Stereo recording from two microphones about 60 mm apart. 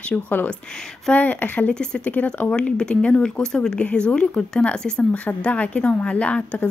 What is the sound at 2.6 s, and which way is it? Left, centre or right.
A woman's voice, centre.